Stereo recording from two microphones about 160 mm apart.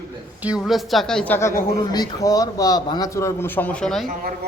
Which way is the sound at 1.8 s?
25° left (ahead or behind).